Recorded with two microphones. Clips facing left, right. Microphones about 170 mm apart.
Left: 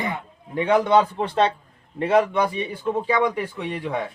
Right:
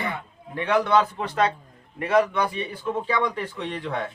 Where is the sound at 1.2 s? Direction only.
30° left (ahead or behind).